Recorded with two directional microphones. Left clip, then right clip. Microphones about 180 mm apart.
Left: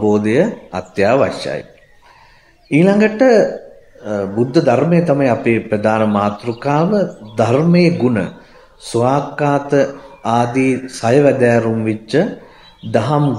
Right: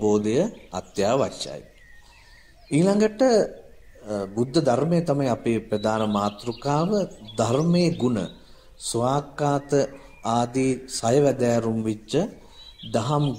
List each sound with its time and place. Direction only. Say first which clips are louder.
0.0 s a man's voice: left 8 dB; 30° right (ahead or behind)
2.7 s a man's voice: left 8 dB; 35° right (ahead or behind)